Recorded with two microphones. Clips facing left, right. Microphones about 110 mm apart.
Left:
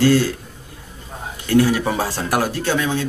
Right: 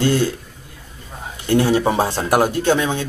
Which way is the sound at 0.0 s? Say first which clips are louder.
Left 2 dB; 20° right (ahead or behind).